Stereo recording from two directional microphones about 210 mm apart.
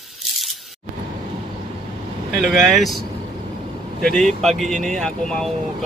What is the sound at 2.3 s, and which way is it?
Speech, 5° left (ahead or behind).